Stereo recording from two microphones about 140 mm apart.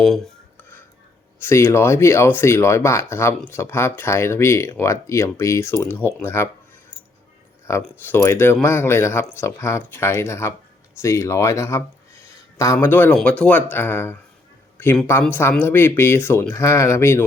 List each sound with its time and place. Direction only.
0.0 s speech: centre (ahead or behind)
1.4 s speech: 20° left (ahead or behind)
7.7 s speech: 20° left (ahead or behind)
15.2 s speech: 15° left (ahead or behind)